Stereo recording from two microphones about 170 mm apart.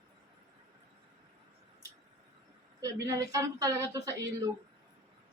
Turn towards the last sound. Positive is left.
turn(degrees=-20)  # may be behind; listen again after turning